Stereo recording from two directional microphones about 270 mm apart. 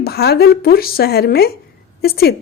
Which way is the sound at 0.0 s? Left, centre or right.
Left.